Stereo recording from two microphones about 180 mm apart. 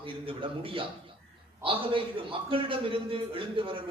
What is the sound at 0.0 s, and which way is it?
A man's voice, 30° right (ahead or behind).